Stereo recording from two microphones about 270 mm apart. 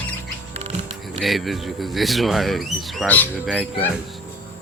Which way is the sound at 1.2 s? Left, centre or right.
Centre.